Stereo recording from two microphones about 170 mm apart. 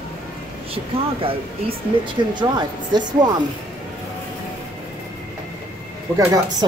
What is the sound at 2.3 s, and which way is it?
Speech, 25° right (ahead or behind).